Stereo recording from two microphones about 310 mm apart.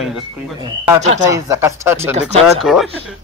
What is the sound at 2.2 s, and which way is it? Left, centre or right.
Speech, right.